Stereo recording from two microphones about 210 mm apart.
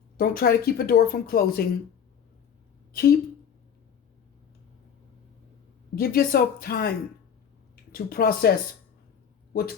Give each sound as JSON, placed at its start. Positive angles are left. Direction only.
{"t": 0.2, "sound": "a woman's voice", "side_deg": 45}
{"t": 2.9, "sound": "a woman's voice", "side_deg": 45}
{"t": 6.0, "sound": "a woman's voice", "side_deg": 45}
{"t": 7.9, "sound": "a woman's voice", "side_deg": 45}